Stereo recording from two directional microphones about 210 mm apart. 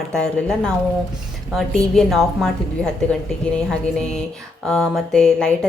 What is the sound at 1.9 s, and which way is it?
A woman's voice, centre (ahead or behind).